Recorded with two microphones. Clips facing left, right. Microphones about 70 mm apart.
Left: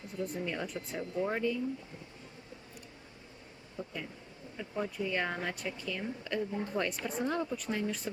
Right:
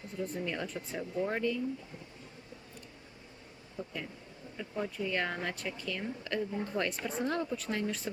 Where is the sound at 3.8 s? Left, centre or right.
Centre.